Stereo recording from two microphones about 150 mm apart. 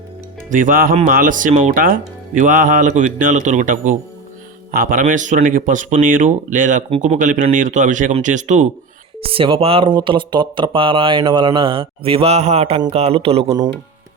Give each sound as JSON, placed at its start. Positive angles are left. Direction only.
{"t": 0.5, "sound": "music", "side_deg": -65}
{"t": 1.0, "sound": "speech", "side_deg": -65}
{"t": 9.2, "sound": "speech", "side_deg": -35}